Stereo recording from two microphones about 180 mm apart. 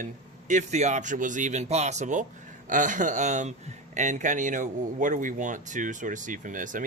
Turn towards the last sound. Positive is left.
turn(degrees=-45)  # may be behind; listen again after turning